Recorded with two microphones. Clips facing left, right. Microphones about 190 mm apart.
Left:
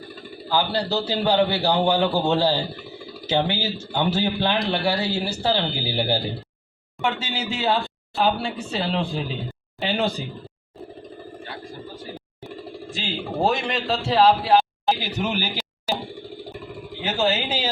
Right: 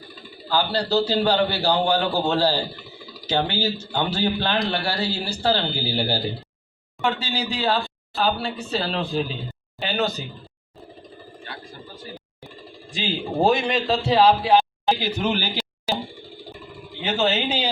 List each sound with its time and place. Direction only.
0.5 s speech: 20° left (ahead or behind)
13.0 s speech: centre (ahead or behind)
17.0 s speech: 5° left (ahead or behind)